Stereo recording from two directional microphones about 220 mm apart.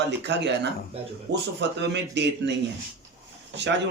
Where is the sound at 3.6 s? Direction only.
50° right (ahead or behind).